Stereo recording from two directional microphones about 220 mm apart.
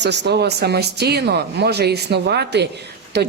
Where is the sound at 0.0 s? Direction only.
50° right (ahead or behind).